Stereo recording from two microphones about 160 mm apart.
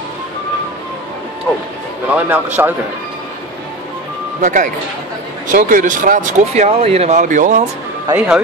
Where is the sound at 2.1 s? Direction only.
10° right (ahead or behind).